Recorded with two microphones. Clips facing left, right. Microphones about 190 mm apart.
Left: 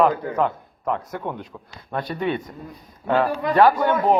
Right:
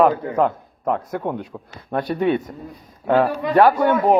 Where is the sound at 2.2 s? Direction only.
50° right (ahead or behind).